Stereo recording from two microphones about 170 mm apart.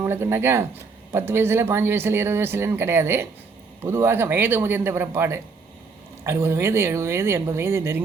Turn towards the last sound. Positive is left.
turn(degrees=-15)  # may be behind; listen again after turning